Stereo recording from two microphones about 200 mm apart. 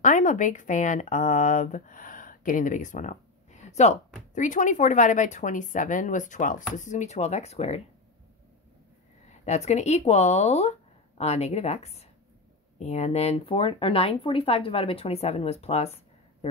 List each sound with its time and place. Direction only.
0.0 s speech: 40° left (ahead or behind)
9.4 s speech: 35° left (ahead or behind)